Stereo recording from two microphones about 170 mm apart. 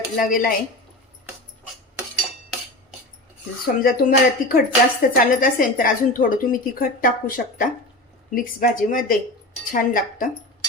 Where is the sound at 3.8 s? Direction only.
60° left (ahead or behind).